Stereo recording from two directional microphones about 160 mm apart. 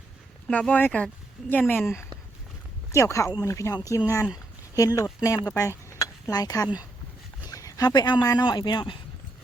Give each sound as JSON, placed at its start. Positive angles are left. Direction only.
{"t": 0.4, "sound": "speech", "side_deg": 5}